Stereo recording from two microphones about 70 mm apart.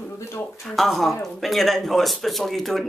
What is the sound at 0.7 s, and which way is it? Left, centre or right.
Speech, centre.